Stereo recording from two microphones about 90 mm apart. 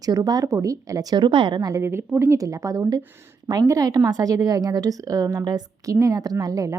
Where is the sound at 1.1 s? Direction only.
60° right (ahead or behind).